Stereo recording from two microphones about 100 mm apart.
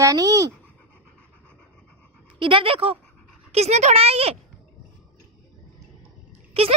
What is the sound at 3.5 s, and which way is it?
Speech, 90° right.